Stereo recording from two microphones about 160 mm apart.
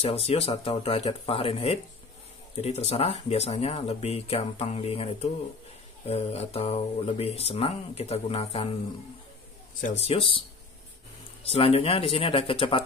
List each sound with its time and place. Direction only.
0.0 s speech: 35° left (ahead or behind)
9.9 s speech: 35° left (ahead or behind)
11.4 s speech: 40° left (ahead or behind)